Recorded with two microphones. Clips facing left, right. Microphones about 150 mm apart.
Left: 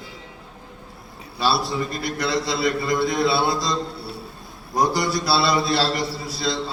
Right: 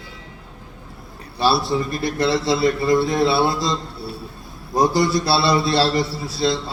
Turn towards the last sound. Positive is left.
turn(degrees=-25)  # may be behind; listen again after turning